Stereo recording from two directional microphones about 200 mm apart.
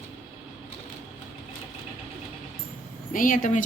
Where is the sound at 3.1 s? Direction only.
40° left (ahead or behind).